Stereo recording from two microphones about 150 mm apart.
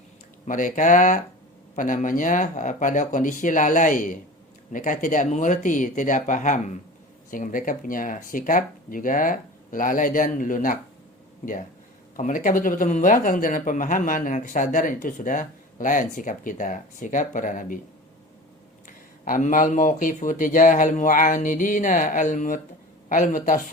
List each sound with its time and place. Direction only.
0.4 s speech: 60° left (ahead or behind)
18.9 s speech: 60° left (ahead or behind)